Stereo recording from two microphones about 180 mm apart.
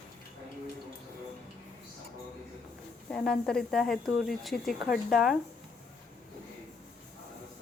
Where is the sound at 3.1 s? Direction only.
5° left (ahead or behind).